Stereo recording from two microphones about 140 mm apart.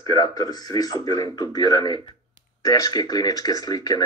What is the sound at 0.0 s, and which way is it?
Speech, 25° left (ahead or behind).